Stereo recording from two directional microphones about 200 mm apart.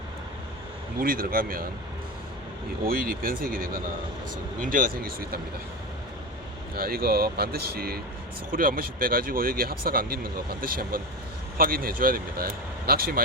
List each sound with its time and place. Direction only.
0.9 s speech: 45° right (ahead or behind)
2.8 s speech: 45° right (ahead or behind)
6.7 s speech: 50° right (ahead or behind)